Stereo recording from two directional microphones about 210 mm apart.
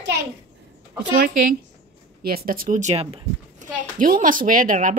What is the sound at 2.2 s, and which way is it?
A woman's voice, 45° right (ahead or behind).